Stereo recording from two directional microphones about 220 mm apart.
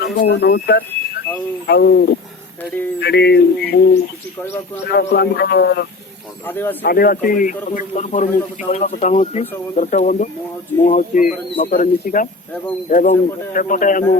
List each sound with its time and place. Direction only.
0.0 s speech: 45° left (ahead or behind)
4.4 s speech: 10° left (ahead or behind)
4.9 s speech: 45° left (ahead or behind)
6.4 s speech: 10° left (ahead or behind)
6.8 s a man's voice: 40° left (ahead or behind)